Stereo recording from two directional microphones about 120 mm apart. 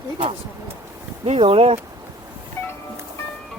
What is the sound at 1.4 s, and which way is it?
Speech, 50° right (ahead or behind).